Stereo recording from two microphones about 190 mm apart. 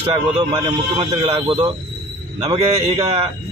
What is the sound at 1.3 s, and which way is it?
A man's voice, 30° right (ahead or behind).